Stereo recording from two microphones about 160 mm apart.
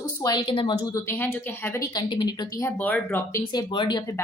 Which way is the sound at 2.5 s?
15° left (ahead or behind).